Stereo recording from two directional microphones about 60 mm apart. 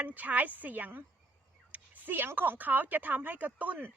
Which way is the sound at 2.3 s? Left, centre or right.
Right.